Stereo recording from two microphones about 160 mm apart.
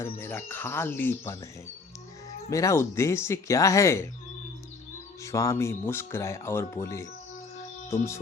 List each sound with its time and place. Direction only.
0.0 s speech: 15° left (ahead or behind)
2.5 s speech: 20° left (ahead or behind)
5.2 s speech: 20° left (ahead or behind)